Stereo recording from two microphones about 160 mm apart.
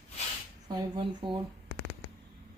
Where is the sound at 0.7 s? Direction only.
30° right (ahead or behind).